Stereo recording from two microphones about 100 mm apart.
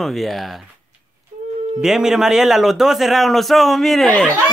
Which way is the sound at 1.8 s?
5° right (ahead or behind).